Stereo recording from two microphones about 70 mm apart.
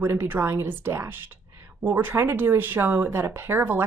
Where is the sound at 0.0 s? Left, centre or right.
Right.